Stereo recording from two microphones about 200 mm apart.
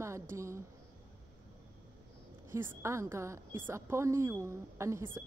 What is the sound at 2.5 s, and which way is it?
A woman's voice, 15° right (ahead or behind).